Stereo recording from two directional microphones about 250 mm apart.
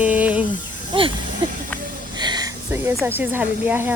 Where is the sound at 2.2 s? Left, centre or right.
Centre.